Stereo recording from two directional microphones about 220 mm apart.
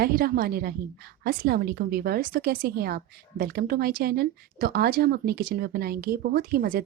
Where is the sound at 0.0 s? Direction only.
45° right (ahead or behind).